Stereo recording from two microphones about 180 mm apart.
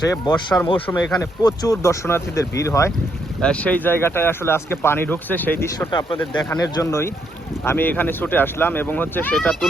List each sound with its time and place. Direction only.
0.0 s speech: 20° left (ahead or behind)
3.4 s speech: 5° left (ahead or behind)
5.9 s speech: 25° left (ahead or behind)
6.1 s speech: 5° left (ahead or behind)
6.6 s speech: 20° left (ahead or behind)